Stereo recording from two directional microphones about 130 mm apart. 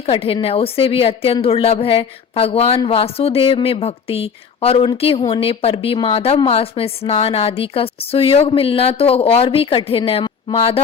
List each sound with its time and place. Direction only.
0.0 s speech: 45° left (ahead or behind)